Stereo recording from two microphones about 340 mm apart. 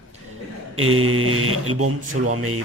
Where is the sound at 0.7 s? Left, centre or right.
Right.